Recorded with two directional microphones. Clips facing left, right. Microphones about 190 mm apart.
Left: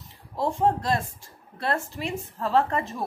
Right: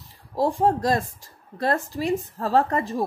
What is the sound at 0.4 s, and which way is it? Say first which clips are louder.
A woman's voice: right 3 dB; 35° right (ahead or behind).